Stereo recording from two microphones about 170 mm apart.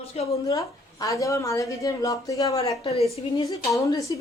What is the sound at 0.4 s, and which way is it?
A woman's voice, 20° left (ahead or behind).